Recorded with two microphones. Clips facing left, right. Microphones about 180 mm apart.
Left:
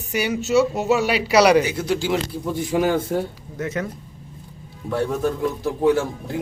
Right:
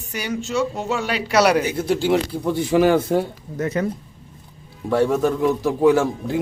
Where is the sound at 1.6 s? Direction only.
55° right (ahead or behind).